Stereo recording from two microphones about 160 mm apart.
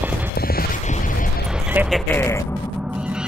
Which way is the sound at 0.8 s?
55° left (ahead or behind).